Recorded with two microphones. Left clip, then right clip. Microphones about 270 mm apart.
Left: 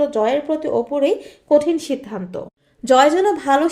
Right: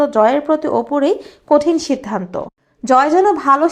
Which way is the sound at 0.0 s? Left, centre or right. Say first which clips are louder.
Right 5 dB; centre.